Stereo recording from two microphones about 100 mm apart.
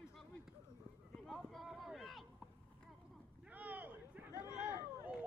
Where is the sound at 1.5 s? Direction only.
Centre (ahead or behind).